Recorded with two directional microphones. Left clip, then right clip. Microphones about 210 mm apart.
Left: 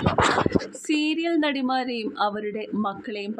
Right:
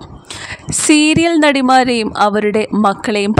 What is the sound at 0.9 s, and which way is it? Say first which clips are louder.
Speech: right 13 dB; 55° right (ahead or behind).